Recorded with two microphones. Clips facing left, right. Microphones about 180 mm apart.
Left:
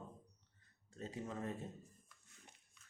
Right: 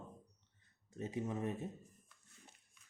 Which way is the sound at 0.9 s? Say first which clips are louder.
Right 5 dB; 20° right (ahead or behind).